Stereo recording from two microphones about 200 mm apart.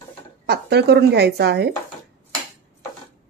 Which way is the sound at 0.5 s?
55° right (ahead or behind).